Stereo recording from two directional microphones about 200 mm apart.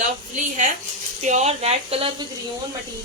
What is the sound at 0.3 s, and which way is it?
A woman's voice, 40° right (ahead or behind).